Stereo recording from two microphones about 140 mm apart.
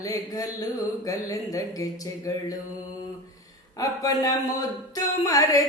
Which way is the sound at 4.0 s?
25° left (ahead or behind).